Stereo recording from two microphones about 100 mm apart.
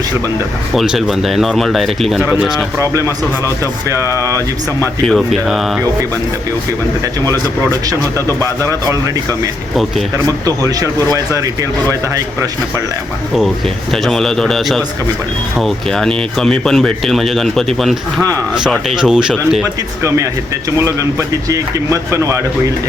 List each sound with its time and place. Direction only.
0.7 s speech: centre (ahead or behind)
5.0 s speech: centre (ahead or behind)
10.4 s speech: 35° right (ahead or behind)
13.9 s speech: 5° left (ahead or behind)
21.5 s speech: 30° right (ahead or behind)